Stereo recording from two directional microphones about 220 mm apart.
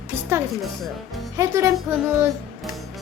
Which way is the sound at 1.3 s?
15° right (ahead or behind).